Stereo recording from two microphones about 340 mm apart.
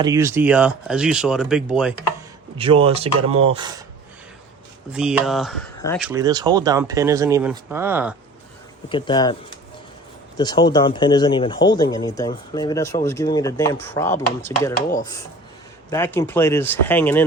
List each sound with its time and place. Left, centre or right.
0.0 s speech: centre
2.6 s speech: centre
4.9 s speech: centre
6.1 s speech: centre
8.9 s speech: centre
10.3 s speech: centre
15.9 s speech: centre